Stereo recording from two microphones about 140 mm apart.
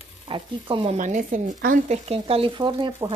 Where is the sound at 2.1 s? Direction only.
45° right (ahead or behind).